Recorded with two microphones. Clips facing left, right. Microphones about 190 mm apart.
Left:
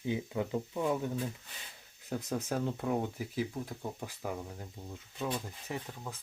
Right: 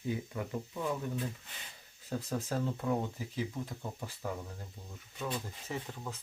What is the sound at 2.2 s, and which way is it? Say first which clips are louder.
Speech: left 1 dB; 20° left (ahead or behind).